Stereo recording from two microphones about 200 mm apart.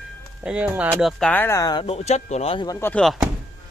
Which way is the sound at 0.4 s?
5° right (ahead or behind).